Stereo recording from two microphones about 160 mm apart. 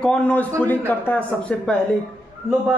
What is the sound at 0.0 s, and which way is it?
A man's voice, 5° left (ahead or behind).